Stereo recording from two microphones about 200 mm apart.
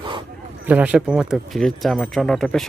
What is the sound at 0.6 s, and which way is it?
Speech, 5° right (ahead or behind).